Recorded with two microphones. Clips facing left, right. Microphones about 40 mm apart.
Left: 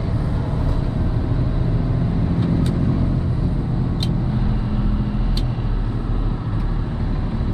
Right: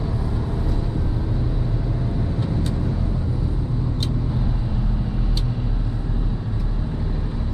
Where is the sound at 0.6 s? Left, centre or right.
Centre.